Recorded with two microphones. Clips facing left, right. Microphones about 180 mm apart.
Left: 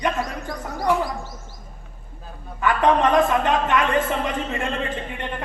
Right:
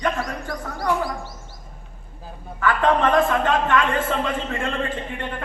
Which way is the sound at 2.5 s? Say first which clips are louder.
Left 1 dB; 20° left (ahead or behind).